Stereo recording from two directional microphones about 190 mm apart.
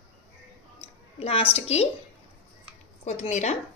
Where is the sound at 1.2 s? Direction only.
30° left (ahead or behind).